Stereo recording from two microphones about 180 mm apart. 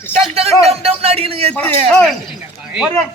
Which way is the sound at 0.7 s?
35° right (ahead or behind).